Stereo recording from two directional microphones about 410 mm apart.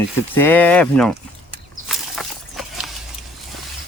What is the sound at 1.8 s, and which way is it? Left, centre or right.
Walk, centre.